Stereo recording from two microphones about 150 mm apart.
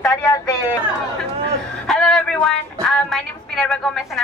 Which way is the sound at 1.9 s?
5° left (ahead or behind).